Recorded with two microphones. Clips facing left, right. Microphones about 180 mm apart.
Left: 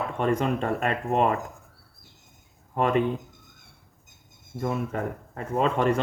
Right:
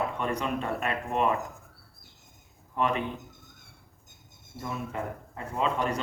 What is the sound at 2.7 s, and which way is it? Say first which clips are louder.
Speech: left 5 dB; 50° left (ahead or behind).